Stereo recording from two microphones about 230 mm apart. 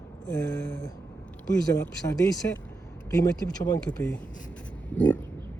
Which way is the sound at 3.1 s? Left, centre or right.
Centre.